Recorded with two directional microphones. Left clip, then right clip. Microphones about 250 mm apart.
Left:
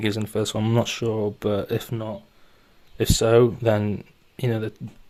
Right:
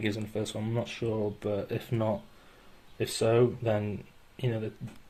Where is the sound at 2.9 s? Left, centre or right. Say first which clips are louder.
Left 8 dB; left.